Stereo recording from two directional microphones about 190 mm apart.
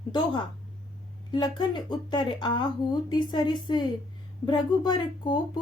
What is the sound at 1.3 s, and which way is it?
Speech, 25° left (ahead or behind).